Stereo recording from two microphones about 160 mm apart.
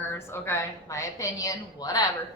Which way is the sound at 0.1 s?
15° left (ahead or behind).